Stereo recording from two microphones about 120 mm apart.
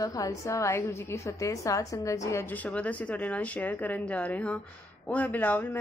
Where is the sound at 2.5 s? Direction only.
10° left (ahead or behind).